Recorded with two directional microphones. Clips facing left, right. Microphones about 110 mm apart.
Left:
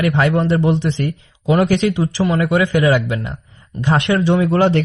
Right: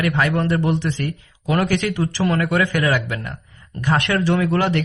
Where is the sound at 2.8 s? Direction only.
25° left (ahead or behind).